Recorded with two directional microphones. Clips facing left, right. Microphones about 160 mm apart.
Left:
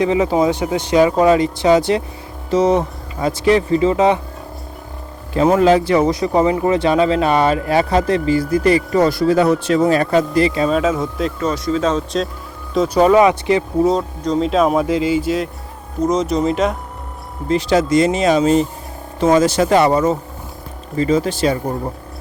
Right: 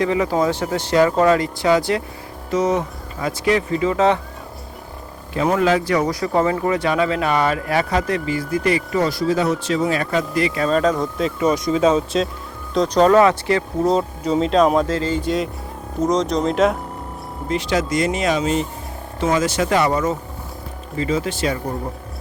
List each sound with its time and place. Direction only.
0.0 s speech: 20° left (ahead or behind)
5.3 s speech: 30° left (ahead or behind)
9.0 s speech: 60° left (ahead or behind); by 10.6 s 30° left (ahead or behind)
10.7 s speech: 5° left (ahead or behind)
11.3 s speech: 15° right (ahead or behind)
12.7 s speech: 5° left (ahead or behind)
13.8 s speech: centre (ahead or behind)
17.5 s speech: 35° left (ahead or behind)